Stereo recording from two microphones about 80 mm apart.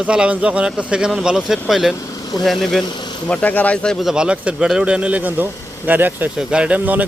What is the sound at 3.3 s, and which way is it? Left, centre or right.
Speech, centre.